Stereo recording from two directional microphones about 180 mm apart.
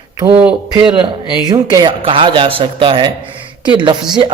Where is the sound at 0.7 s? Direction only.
25° right (ahead or behind).